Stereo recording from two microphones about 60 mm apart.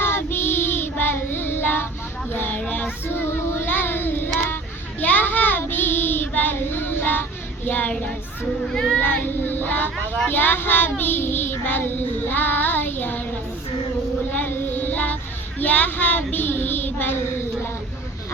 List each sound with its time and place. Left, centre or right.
0.0 s child singing: left
7.9 s child singing: left
8.6 s speech: centre
9.0 s speech: left
10.2 s child singing: left
14.3 s child singing: left